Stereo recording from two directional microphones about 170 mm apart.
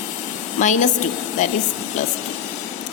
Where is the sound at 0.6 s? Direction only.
45° left (ahead or behind).